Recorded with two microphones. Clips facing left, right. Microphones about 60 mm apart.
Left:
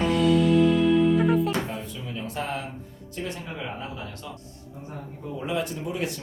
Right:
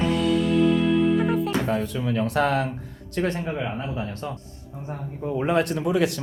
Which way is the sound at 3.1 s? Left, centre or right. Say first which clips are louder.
Right 8 dB; right.